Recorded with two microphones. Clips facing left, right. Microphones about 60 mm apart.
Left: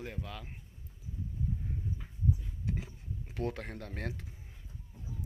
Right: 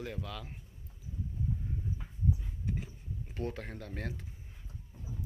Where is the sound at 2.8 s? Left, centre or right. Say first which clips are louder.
Even; left.